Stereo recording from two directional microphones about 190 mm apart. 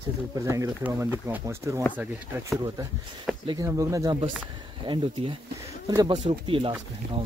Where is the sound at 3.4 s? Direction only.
20° right (ahead or behind).